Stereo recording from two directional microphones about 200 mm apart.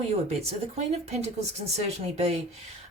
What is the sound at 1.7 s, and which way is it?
Speech, 30° right (ahead or behind).